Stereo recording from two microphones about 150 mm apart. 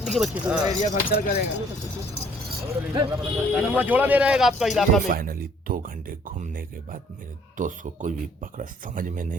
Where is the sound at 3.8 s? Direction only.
10° right (ahead or behind).